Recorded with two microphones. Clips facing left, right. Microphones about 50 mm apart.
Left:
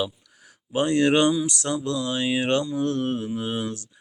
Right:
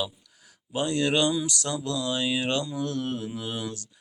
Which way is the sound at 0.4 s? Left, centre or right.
Left.